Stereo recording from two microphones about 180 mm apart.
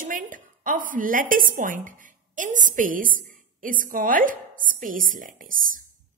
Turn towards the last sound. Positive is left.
turn(degrees=-50)  # may be behind; listen again after turning